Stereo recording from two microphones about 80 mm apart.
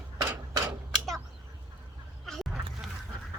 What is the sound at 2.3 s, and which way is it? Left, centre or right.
Fowl, centre.